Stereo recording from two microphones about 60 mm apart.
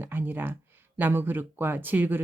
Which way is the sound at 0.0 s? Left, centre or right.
Right.